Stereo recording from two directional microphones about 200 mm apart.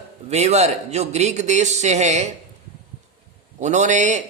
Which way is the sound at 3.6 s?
35° right (ahead or behind).